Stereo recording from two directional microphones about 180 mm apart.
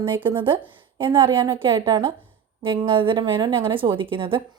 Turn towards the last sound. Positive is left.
turn(degrees=-30)  # may be behind; listen again after turning